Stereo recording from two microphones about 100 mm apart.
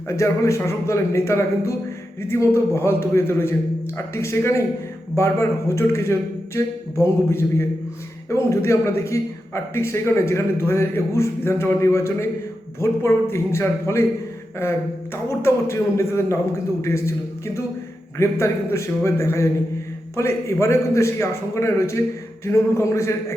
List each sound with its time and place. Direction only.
0.1 s a man's voice: 30° left (ahead or behind)